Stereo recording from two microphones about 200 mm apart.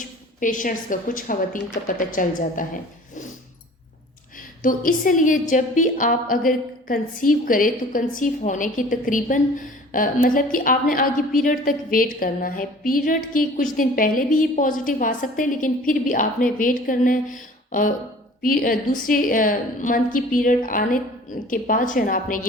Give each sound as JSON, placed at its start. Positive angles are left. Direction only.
{"t": 0.0, "sound": "a woman's voice", "side_deg": 40}
{"t": 4.6, "sound": "a woman's voice", "side_deg": 45}